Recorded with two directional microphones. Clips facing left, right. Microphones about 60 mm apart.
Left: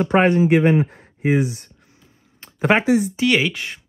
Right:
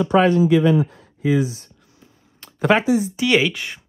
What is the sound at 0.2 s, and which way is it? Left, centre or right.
Speech, left.